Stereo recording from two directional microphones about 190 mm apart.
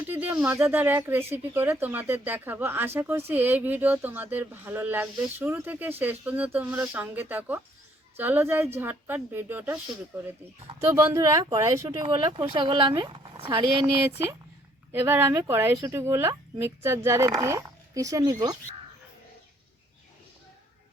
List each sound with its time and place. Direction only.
0.0 s speech: 10° right (ahead or behind)
10.8 s speech: 10° right (ahead or behind)
14.9 s speech: 10° right (ahead or behind)